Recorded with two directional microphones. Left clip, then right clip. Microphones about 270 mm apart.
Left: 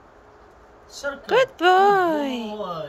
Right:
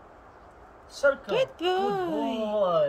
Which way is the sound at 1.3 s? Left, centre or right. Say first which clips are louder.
Left 9 dB; centre.